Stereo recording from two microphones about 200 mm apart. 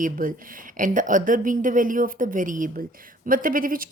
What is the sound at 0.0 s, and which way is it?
A woman's voice, 45° right (ahead or behind).